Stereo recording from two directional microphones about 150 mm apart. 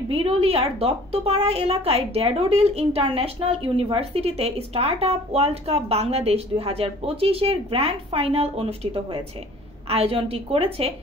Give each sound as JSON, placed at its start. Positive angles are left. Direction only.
{"t": 0.1, "sound": "a woman's voice", "side_deg": -40}